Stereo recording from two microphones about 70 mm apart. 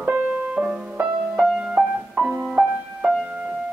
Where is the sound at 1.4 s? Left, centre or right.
Centre.